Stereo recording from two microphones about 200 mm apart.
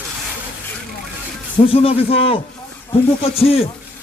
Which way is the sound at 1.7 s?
30° left (ahead or behind).